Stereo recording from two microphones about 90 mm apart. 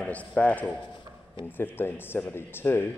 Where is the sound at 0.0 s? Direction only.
15° left (ahead or behind).